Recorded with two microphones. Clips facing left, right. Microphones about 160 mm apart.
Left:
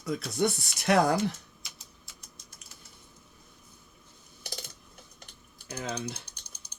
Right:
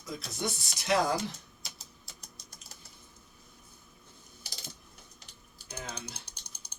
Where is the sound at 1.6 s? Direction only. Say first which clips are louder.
Right 2 dB; 35° right (ahead or behind).